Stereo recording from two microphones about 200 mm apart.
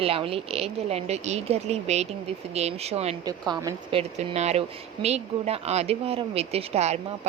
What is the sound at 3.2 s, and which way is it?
Speech, 20° right (ahead or behind).